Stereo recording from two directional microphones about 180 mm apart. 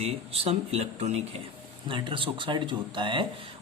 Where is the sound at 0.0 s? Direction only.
35° right (ahead or behind).